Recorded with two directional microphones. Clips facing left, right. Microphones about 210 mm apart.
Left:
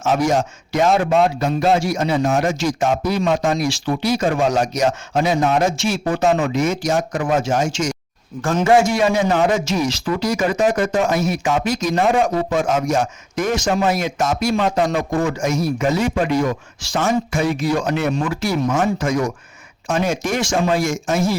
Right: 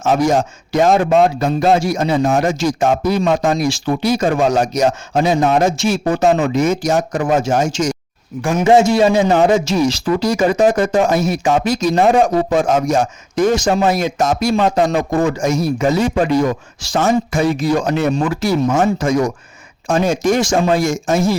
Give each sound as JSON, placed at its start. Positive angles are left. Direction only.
{"t": 0.0, "sound": "speech", "side_deg": -40}
{"t": 8.4, "sound": "a man's voice", "side_deg": -15}